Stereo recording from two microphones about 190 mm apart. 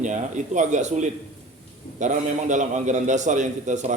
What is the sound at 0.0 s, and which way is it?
A man's voice, 40° right (ahead or behind).